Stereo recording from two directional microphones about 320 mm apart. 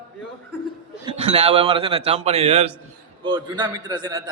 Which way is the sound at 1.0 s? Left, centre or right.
Centre.